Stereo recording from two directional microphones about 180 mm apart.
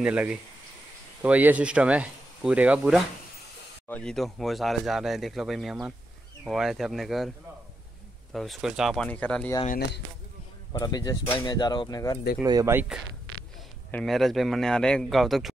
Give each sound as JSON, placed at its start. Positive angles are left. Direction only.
{"t": 0.0, "sound": "speech", "side_deg": -5}
{"t": 8.3, "sound": "speech", "side_deg": 0}
{"t": 10.7, "sound": "speech", "side_deg": 20}
{"t": 12.4, "sound": "speech", "side_deg": -20}
{"t": 13.9, "sound": "speech", "side_deg": 0}